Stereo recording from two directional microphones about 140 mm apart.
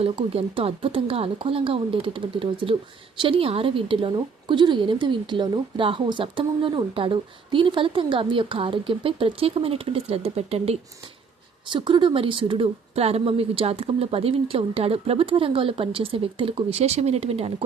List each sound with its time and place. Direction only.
0.0 s a woman's voice: 40° right (ahead or behind)
11.7 s a woman's voice: 35° right (ahead or behind)